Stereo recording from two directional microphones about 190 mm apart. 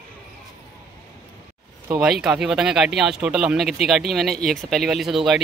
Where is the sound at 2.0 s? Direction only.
5° right (ahead or behind).